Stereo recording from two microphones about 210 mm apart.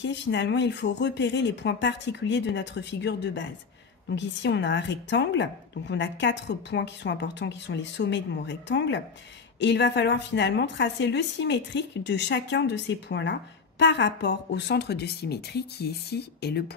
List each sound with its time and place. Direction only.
0.0 s a woman's voice: 55° left (ahead or behind)